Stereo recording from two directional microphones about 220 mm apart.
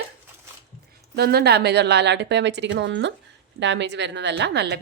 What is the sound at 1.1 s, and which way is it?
A woman's voice, 45° right (ahead or behind).